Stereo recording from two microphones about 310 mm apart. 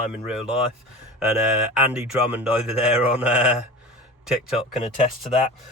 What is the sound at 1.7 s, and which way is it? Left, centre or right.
Speech, centre.